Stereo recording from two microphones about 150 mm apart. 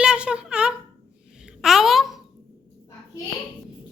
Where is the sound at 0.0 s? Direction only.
5° right (ahead or behind).